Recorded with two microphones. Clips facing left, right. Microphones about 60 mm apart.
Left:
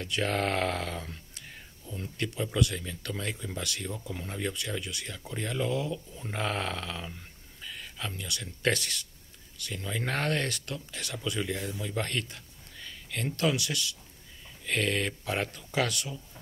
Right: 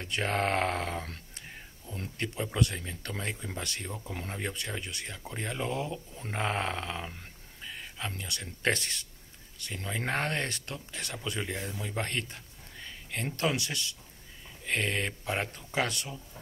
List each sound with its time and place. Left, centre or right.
0.0 s speech: right
2.1 s speech: right
6.3 s a sound: right
8.2 s speech: right